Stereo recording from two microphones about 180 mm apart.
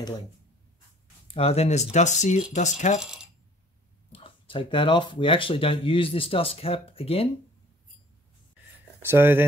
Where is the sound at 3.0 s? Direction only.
5° right (ahead or behind).